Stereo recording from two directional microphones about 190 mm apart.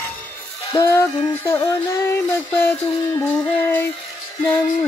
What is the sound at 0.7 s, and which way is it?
Music, 15° left (ahead or behind).